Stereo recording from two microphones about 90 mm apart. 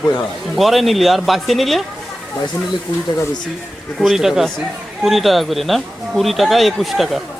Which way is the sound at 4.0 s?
5° right (ahead or behind).